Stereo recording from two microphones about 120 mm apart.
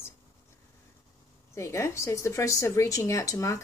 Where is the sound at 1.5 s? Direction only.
25° left (ahead or behind).